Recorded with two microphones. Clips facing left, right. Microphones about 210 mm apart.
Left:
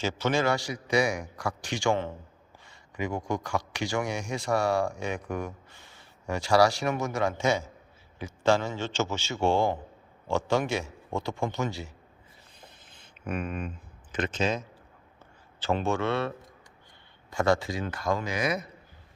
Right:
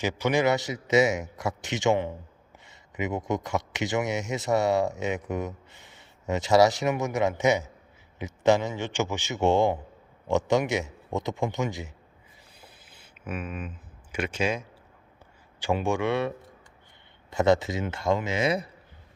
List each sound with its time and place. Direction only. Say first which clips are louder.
0.0 s a man's voice: right 2 dB; 15° right (ahead or behind)
12.6 s a sound: left 1 dB; 10° right (ahead or behind)
15.6 s a man's voice: right 1 dB; 15° right (ahead or behind)
17.3 s speech: right 3 dB; 20° right (ahead or behind)